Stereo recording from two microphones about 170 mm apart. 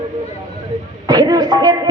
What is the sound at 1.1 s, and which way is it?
Speech, 25° right (ahead or behind).